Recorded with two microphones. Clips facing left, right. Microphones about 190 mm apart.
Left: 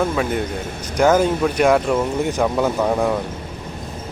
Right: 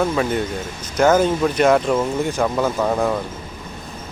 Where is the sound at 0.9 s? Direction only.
10° left (ahead or behind).